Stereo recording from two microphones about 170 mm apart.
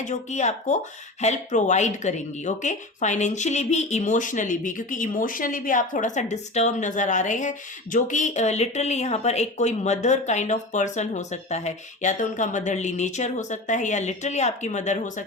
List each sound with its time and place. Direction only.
0.0 s speech: 45° left (ahead or behind)